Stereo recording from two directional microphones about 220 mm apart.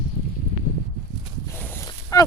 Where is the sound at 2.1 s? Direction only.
15° left (ahead or behind).